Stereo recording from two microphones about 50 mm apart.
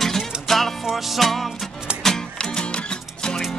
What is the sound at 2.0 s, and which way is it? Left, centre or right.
Music, centre.